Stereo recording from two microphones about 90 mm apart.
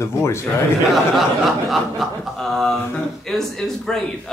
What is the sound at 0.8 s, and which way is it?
A man's voice, centre (ahead or behind).